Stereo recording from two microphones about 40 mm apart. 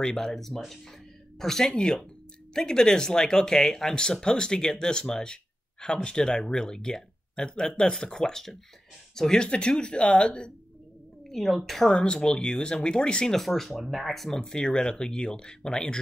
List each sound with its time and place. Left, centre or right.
0.0 s speech: left
0.3 s speech: centre
9.5 s speech: left
11.2 s a woman's voice: centre
11.9 s speech: left
13.3 s a woman's voice: centre
14.4 s speech: centre